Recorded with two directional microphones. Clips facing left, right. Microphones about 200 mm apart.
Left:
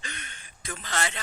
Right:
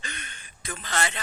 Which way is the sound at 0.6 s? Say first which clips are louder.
Right 2 dB; 65° right (ahead or behind).